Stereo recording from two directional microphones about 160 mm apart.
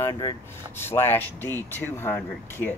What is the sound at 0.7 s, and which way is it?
Speech, 15° left (ahead or behind).